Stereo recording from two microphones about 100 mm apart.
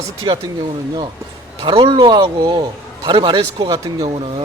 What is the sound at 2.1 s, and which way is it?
A man's voice, 55° right (ahead or behind).